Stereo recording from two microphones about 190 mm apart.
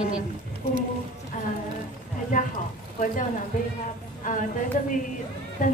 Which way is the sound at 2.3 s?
45° left (ahead or behind).